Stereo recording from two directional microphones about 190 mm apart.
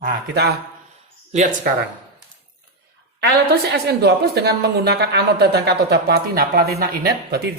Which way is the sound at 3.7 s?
60° right (ahead or behind).